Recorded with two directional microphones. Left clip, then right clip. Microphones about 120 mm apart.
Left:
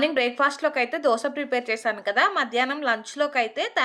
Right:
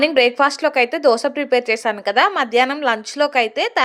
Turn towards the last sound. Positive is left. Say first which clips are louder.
# right 7 dB
turn(degrees=-30)  # may be behind; listen again after turning